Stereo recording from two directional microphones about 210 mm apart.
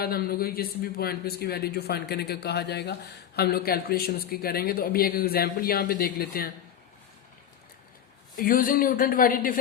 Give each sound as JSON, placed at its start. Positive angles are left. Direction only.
{"t": 0.0, "sound": "a man's voice", "side_deg": 45}
{"t": 8.4, "sound": "a man's voice", "side_deg": 40}